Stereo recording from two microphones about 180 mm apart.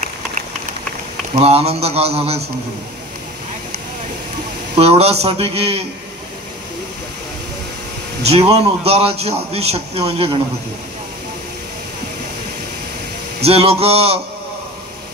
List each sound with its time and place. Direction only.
1.4 s a man's voice: 35° right (ahead or behind)
4.7 s a man's voice: 35° right (ahead or behind)
8.3 s a man's voice: 35° right (ahead or behind)
13.4 s a man's voice: 35° right (ahead or behind)